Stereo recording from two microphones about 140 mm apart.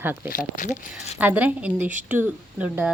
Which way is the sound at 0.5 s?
60° left (ahead or behind).